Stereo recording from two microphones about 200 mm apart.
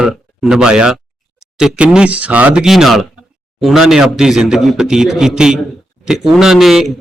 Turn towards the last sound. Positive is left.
turn(degrees=0)  # may be behind; listen again after turning